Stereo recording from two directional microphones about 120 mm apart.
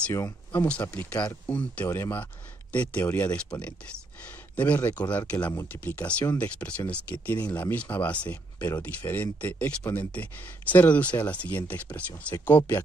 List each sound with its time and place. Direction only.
0.7 s speech: 10° left (ahead or behind)